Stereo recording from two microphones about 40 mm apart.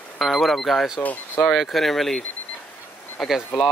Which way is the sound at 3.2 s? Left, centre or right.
Centre.